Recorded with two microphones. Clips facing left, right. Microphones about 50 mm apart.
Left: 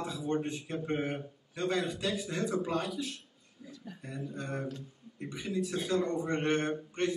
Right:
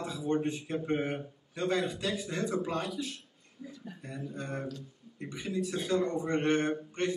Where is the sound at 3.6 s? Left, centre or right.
Centre.